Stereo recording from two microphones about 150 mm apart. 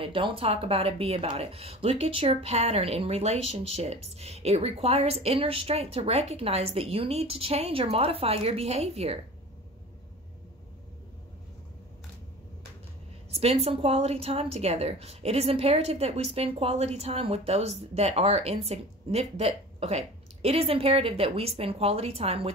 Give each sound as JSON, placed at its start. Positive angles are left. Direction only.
{"t": 0.0, "sound": "speech", "side_deg": -35}
{"t": 13.3, "sound": "a woman's voice", "side_deg": -40}